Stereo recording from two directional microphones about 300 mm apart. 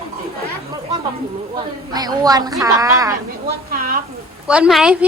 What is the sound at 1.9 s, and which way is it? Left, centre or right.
Speech, centre.